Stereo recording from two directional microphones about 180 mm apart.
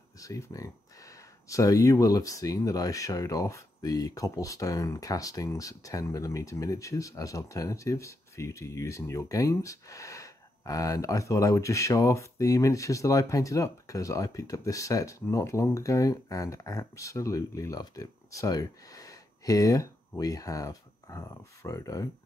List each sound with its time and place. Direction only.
0.2 s speech: 20° left (ahead or behind)